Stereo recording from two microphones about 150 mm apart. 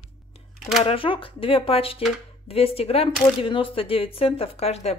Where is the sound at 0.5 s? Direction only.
Centre (ahead or behind).